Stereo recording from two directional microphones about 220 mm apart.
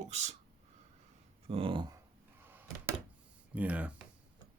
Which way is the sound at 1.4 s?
25° right (ahead or behind).